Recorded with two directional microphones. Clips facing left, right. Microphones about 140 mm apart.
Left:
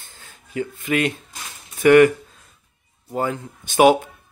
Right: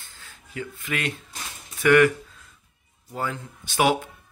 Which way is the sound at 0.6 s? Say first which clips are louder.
Left 9 dB; 20° left (ahead or behind).